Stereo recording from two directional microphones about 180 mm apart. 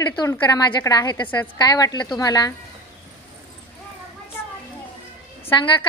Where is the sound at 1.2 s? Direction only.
10° left (ahead or behind).